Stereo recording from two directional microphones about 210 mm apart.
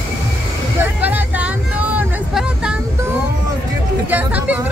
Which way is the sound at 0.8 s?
10° right (ahead or behind).